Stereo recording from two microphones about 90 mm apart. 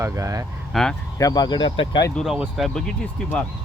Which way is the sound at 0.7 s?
5° left (ahead or behind).